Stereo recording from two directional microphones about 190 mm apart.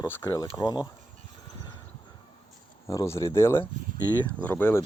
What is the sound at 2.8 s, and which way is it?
Speech, 15° left (ahead or behind).